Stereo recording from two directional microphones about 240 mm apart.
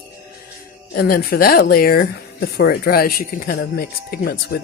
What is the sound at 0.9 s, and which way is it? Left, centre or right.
Speech, left.